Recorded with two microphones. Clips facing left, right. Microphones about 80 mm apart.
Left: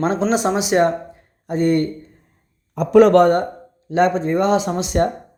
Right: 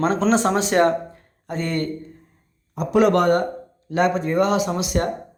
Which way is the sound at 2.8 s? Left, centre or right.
Left.